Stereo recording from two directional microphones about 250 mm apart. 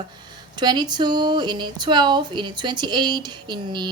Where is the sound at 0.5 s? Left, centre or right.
Centre.